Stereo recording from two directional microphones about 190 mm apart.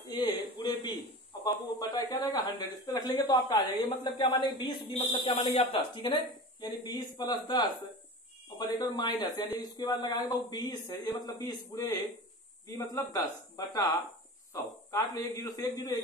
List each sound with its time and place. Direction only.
0.1 s a man's voice: 25° left (ahead or behind)
14.5 s a woman's voice: 15° left (ahead or behind)